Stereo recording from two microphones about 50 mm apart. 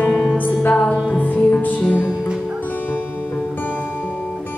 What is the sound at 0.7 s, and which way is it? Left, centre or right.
Music, centre.